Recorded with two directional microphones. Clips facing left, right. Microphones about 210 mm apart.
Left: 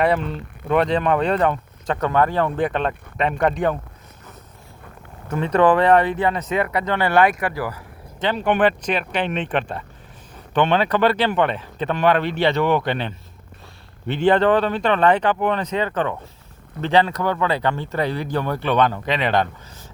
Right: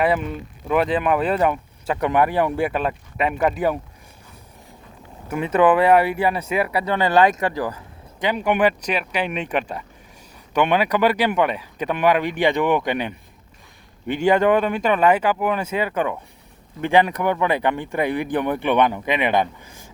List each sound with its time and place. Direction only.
0.0 s speech: 5° right (ahead or behind)
5.3 s speech: 5° right (ahead or behind)